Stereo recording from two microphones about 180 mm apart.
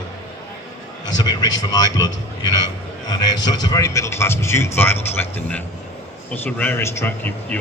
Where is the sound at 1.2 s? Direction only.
25° left (ahead or behind).